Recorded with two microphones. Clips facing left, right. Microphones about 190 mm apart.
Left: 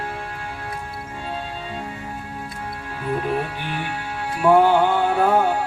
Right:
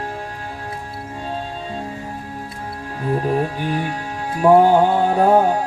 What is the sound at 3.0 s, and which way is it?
Music, 35° right (ahead or behind).